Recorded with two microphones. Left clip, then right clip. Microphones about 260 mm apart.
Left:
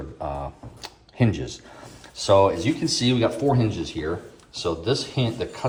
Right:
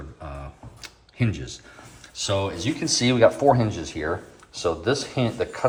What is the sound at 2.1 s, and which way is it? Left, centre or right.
Speech, centre.